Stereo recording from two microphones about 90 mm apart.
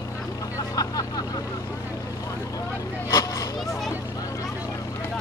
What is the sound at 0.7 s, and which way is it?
Vehicle, 45° left (ahead or behind).